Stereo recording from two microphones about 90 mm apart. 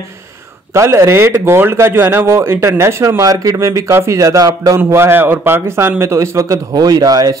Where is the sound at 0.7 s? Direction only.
30° right (ahead or behind).